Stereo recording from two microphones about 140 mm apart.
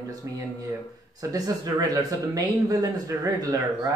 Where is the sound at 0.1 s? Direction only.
25° right (ahead or behind).